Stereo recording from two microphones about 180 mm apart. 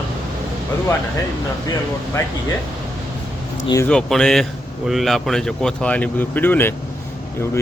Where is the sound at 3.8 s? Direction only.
5° left (ahead or behind).